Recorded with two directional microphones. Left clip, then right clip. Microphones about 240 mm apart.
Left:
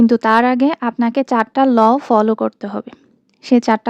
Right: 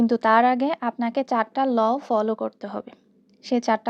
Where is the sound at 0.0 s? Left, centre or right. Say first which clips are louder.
Left 5 dB; left.